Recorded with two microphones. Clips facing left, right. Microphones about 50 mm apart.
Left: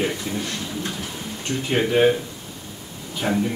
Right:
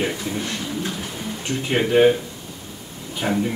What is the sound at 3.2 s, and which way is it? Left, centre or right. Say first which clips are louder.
Speech: even; centre.